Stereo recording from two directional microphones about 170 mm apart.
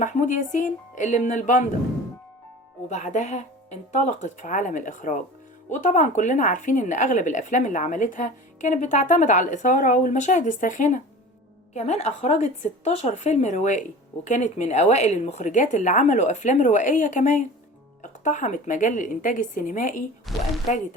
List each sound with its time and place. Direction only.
0.0 s speech: 45° left (ahead or behind)
2.9 s a woman's voice: 45° left (ahead or behind)
20.3 s a woman's voice: centre (ahead or behind)